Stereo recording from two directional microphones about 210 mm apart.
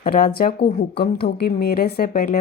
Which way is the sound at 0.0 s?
45° left (ahead or behind).